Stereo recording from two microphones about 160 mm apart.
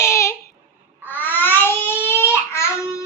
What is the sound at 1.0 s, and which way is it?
Baby cry, 10° left (ahead or behind).